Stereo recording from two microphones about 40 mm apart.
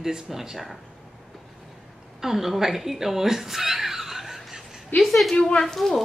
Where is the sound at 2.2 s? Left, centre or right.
Centre.